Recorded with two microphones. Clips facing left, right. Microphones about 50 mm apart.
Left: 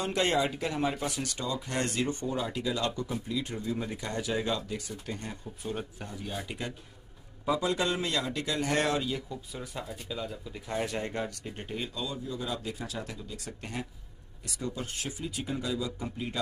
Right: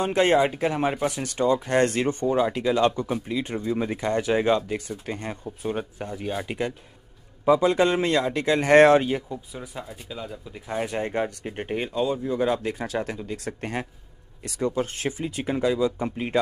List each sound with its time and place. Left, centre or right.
0.0 s speech: right
9.3 s speech: centre; by 16.3 s right